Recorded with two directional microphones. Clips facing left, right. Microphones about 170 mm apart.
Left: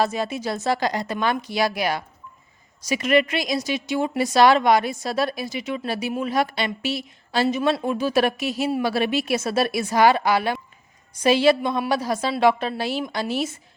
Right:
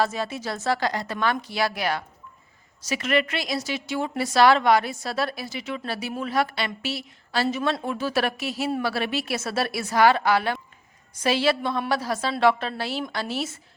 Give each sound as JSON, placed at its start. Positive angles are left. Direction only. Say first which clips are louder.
{"t": 0.0, "sound": "a woman's voice", "louder": "left 3 dB", "side_deg": 15}